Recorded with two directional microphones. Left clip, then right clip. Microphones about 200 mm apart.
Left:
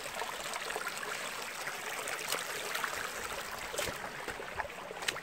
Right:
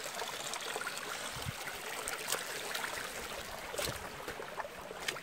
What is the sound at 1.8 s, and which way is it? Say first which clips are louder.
Stream: left 1 dB; centre (ahead or behind).